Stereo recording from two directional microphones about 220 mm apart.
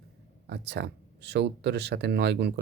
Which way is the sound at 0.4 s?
50° right (ahead or behind).